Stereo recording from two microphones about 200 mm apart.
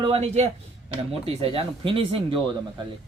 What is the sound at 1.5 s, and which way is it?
Speech, 25° right (ahead or behind).